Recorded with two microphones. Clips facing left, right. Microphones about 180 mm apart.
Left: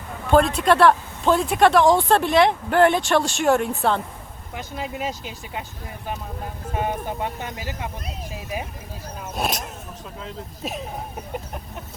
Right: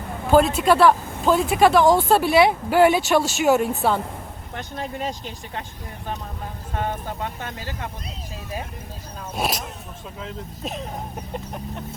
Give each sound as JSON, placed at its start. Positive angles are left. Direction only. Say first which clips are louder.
{"t": 0.3, "sound": "speech", "louder": "right 1 dB", "side_deg": -5}
{"t": 6.7, "sound": "speech", "louder": "left 2 dB", "side_deg": 15}
{"t": 9.3, "sound": "speech", "louder": "right 1 dB", "side_deg": 0}